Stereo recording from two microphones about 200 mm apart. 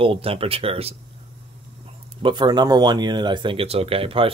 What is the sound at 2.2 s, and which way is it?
Speech, 20° right (ahead or behind).